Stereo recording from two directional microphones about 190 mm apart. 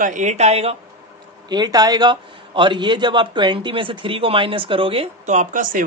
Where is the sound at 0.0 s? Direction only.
40° right (ahead or behind).